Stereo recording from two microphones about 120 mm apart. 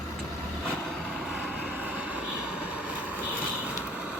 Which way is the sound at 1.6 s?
10° right (ahead or behind).